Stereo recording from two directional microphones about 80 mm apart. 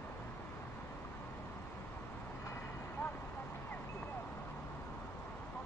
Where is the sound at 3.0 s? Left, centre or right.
Centre.